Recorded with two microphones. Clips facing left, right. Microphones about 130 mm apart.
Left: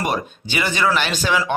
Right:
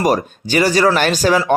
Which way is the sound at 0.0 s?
40° right (ahead or behind).